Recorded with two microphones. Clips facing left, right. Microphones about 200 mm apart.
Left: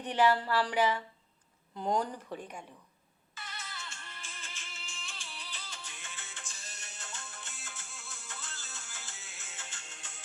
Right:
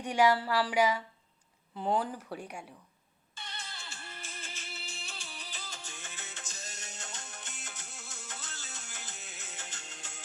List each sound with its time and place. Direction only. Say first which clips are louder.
0.0 s speech: right 1 dB; 10° right (ahead or behind)
3.5 s music: left 1 dB; 30° right (ahead or behind)